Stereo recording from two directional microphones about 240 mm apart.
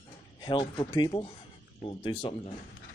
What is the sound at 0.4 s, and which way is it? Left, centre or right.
Speech, centre.